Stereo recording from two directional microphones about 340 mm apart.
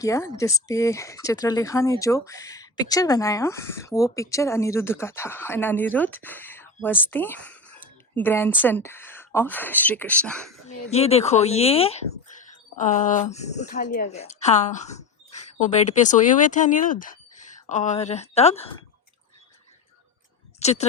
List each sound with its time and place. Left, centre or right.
0.0 s speech: centre
10.9 s a woman's voice: centre
20.6 s speech: centre